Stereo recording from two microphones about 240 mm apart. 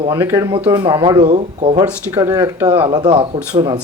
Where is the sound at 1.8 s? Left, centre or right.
Centre; by 3.4 s right.